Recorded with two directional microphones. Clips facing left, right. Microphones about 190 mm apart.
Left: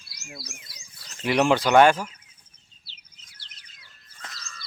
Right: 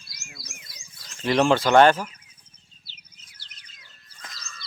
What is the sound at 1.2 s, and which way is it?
Speech, 10° left (ahead or behind).